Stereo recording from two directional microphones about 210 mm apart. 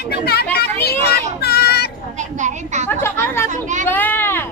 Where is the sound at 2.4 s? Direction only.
35° right (ahead or behind).